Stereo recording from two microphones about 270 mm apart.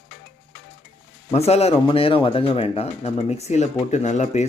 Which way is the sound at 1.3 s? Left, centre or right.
Left.